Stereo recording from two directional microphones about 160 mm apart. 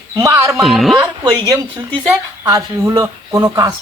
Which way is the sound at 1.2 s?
25° right (ahead or behind).